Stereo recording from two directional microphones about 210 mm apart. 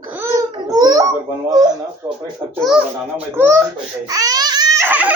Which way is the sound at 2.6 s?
5° right (ahead or behind).